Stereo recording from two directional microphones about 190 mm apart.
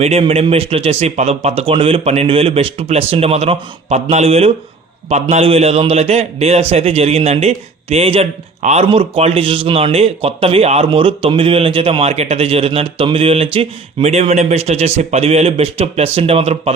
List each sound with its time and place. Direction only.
0.0 s a man's voice: 30° right (ahead or behind)